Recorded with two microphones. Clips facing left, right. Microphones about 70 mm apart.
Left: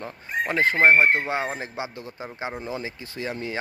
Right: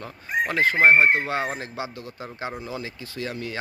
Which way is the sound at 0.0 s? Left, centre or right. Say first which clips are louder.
Right 2 dB; left.